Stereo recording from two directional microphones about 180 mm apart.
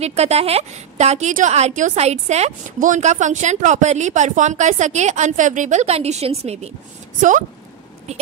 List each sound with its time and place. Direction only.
0.0 s a woman's voice: 35° right (ahead or behind)